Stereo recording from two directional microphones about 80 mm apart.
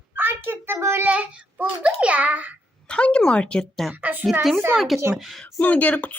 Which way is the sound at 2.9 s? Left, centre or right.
Centre.